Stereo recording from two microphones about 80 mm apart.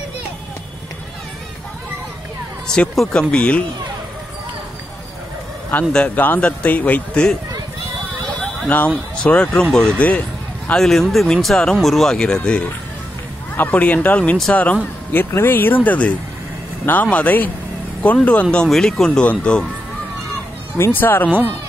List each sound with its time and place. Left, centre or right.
3.1 s speech: centre
5.9 s a man's voice: centre
8.6 s a man's voice: centre
10.8 s speech: centre
15.1 s a man's voice: left; by 19.3 s centre
20.7 s a man's voice: left